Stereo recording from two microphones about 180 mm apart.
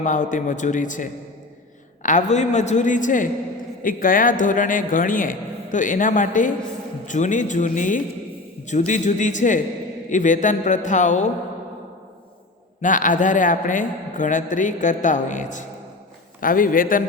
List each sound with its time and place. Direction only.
0.0 s a man's voice: 45° left (ahead or behind)
12.8 s a man's voice: 45° left (ahead or behind)